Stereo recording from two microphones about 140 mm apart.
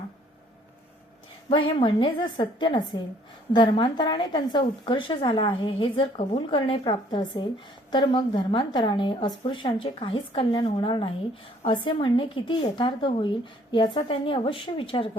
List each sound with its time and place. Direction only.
1.5 s a woman's voice: 40° left (ahead or behind)